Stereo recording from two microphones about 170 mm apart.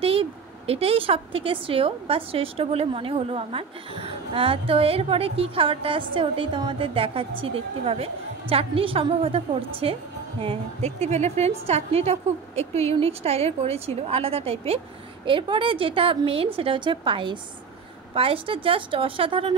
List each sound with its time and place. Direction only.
0.0 s a woman's voice: 35° right (ahead or behind)